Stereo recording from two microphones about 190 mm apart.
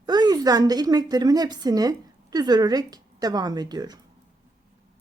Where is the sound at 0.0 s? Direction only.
20° right (ahead or behind).